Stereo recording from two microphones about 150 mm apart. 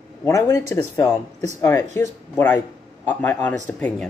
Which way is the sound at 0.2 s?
20° left (ahead or behind).